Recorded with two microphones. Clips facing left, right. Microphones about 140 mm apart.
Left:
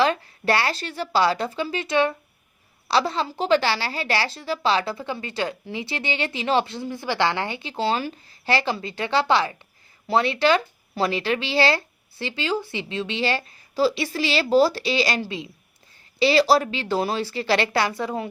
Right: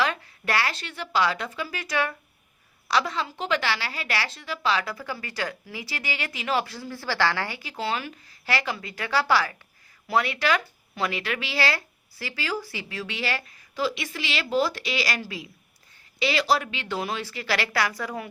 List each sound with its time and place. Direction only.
0.0 s a woman's voice: 30° left (ahead or behind)